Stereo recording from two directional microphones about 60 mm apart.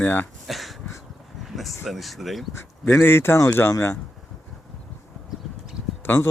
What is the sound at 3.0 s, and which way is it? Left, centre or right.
Speech, left.